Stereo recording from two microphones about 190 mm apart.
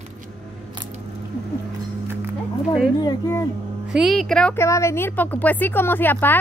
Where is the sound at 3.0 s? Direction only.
15° left (ahead or behind).